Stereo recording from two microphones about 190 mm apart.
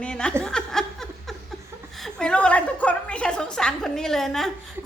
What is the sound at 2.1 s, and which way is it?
A woman's voice, 5° left (ahead or behind).